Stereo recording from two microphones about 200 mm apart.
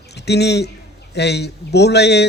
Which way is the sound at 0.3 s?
55° left (ahead or behind).